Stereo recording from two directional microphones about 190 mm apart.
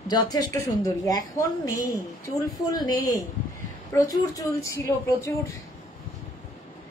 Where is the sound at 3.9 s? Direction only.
15° left (ahead or behind).